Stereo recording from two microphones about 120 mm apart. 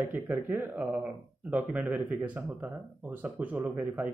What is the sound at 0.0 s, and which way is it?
Speech, 15° right (ahead or behind).